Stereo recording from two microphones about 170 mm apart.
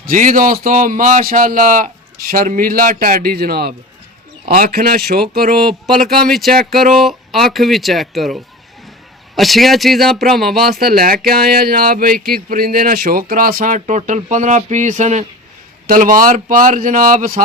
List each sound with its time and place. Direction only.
0.0 s a man's voice: 50° right (ahead or behind)
5.8 s speech: centre (ahead or behind)
10.8 s speech: 65° right (ahead or behind); by 15.3 s 40° right (ahead or behind)
15.9 s a man's voice: 55° right (ahead or behind)